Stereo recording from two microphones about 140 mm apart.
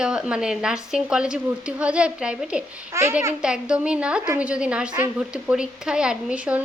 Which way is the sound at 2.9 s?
20° right (ahead or behind).